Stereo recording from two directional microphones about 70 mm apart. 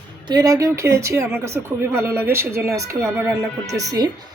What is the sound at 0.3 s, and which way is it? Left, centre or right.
Speech, right.